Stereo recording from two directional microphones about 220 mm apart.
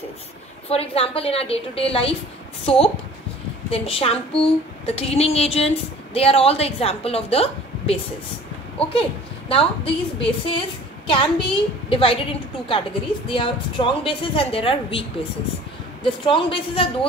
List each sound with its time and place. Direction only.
0.7 s a woman's voice: 25° left (ahead or behind)
9.5 s a woman's voice: 25° left (ahead or behind)